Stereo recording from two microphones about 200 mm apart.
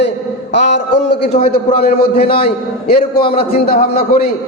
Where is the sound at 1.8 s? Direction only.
30° left (ahead or behind).